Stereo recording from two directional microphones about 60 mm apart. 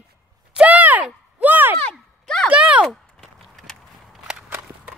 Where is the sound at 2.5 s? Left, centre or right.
Right.